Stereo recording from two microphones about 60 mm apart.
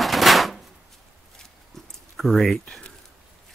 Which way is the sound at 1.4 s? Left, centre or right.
Centre.